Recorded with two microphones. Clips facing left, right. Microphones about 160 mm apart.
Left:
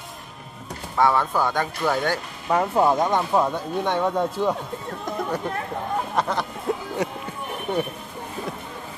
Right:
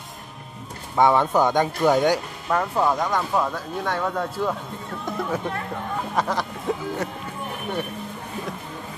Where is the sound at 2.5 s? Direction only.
20° left (ahead or behind).